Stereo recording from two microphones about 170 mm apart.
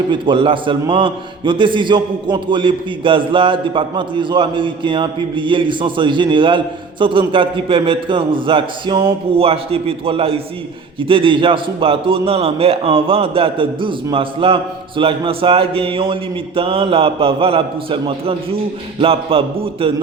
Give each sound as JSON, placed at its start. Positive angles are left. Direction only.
{"t": 0.1, "sound": "a man's voice", "side_deg": -30}